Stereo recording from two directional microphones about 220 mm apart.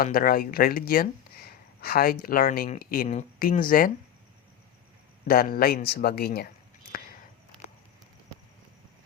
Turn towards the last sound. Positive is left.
turn(degrees=40)  # may be behind; listen again after turning